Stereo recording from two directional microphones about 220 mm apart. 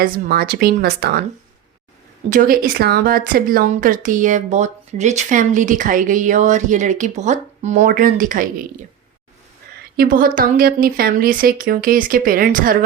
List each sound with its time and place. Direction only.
0.0 s speech: 45° right (ahead or behind)
2.3 s speech: 40° right (ahead or behind)
10.0 s speech: 40° right (ahead or behind)